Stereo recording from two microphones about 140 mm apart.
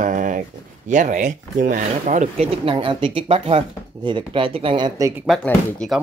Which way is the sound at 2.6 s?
35° right (ahead or behind).